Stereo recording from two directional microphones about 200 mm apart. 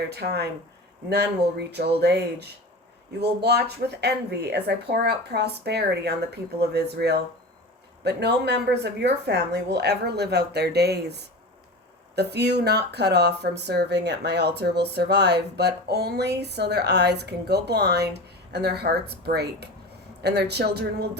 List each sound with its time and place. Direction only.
0.1 s speech: 55° right (ahead or behind)